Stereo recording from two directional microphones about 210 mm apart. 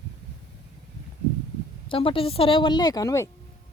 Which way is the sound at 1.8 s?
25° left (ahead or behind).